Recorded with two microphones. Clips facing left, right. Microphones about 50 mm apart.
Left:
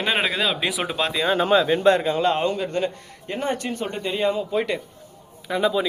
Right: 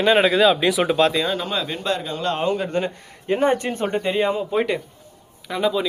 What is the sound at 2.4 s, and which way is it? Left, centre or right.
Speech, centre.